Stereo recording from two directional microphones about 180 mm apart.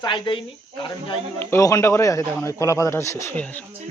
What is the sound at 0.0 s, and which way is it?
Speech, 25° left (ahead or behind).